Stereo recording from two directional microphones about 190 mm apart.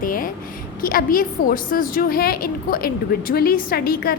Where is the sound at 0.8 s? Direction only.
50° left (ahead or behind).